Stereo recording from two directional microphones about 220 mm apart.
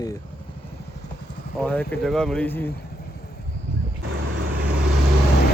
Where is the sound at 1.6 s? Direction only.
5° left (ahead or behind).